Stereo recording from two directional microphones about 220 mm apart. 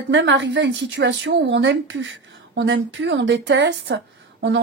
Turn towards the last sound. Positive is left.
turn(degrees=-55)  # may be behind; listen again after turning